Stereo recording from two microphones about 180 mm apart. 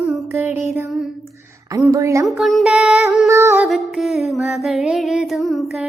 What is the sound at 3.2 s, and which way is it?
Speech, 15° right (ahead or behind).